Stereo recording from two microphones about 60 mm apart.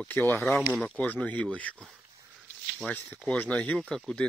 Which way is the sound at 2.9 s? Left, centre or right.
Left.